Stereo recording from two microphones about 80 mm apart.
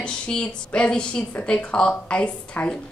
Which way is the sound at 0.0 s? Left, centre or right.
Centre.